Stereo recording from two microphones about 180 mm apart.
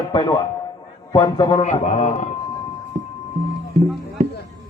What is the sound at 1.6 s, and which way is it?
Speech, 45° left (ahead or behind).